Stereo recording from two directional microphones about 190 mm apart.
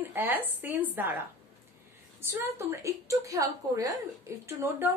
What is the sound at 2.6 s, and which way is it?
A woman's voice, 15° right (ahead or behind).